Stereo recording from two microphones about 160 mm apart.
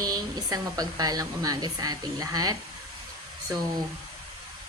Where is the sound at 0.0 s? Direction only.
25° right (ahead or behind).